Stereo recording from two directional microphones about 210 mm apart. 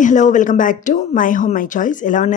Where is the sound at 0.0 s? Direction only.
35° left (ahead or behind).